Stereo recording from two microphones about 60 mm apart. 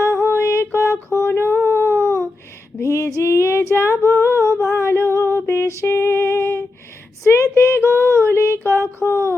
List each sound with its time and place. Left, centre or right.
0.0 s music: left
1.3 s a sound: left
2.8 s female singing: left
4.8 s music: left
7.3 s female singing: left
9.0 s a sound: left